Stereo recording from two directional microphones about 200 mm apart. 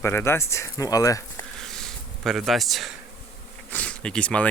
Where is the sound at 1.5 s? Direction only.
Centre (ahead or behind).